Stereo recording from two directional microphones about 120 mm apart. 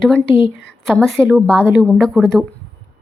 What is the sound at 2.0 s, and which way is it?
Speech, 5° left (ahead or behind).